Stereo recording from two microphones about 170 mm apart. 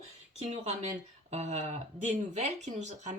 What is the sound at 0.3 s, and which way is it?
Speech, 40° right (ahead or behind).